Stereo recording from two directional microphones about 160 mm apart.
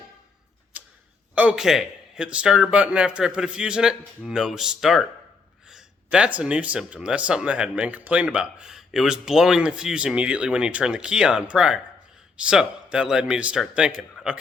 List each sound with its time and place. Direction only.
0.7 s tick-tock: 10° right (ahead or behind)
1.4 s a man's voice: 5° right (ahead or behind)